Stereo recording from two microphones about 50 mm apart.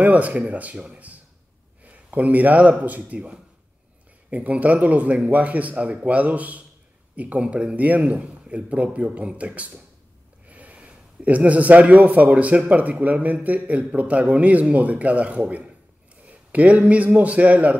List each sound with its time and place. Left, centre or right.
0.0 s a man's voice: right
1.8 s a sound: right
3.0 s a man's voice: right